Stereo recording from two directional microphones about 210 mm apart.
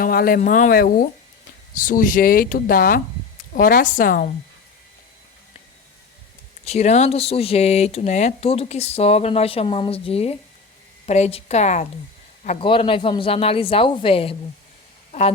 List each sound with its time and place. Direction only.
0.0 s speech: 45° left (ahead or behind)
6.7 s speech: 30° left (ahead or behind)